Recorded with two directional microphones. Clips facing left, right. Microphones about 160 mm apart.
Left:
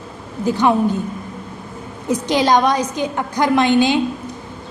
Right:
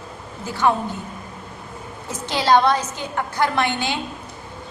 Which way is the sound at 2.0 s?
15° left (ahead or behind).